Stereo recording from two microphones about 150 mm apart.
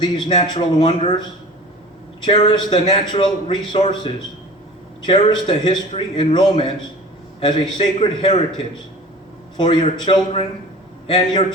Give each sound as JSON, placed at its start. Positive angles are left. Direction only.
{"t": 0.0, "sound": "a man's voice", "side_deg": 30}
{"t": 2.2, "sound": "a man's voice", "side_deg": 35}